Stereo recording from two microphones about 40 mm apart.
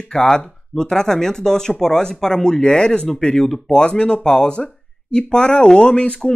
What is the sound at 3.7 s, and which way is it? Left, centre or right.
Speech, left.